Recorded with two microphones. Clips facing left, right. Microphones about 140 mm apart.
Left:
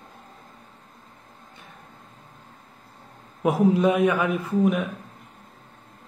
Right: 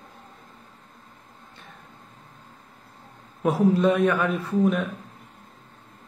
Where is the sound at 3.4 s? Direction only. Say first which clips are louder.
Left 1 dB; 15° left (ahead or behind).